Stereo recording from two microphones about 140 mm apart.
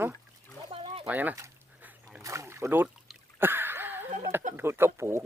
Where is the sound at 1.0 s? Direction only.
10° right (ahead or behind).